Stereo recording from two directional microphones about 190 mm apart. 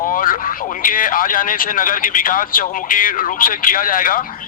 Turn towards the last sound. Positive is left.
turn(degrees=45)  # may be behind; listen again after turning